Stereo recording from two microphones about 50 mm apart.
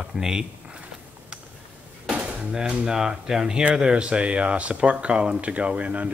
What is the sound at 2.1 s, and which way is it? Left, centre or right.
Dishes, right.